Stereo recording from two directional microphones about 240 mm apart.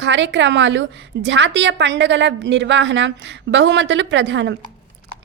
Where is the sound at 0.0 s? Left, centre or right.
Right.